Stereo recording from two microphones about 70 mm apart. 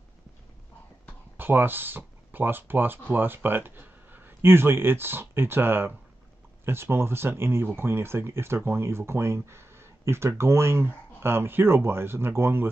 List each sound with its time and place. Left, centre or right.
1.3 s speech: right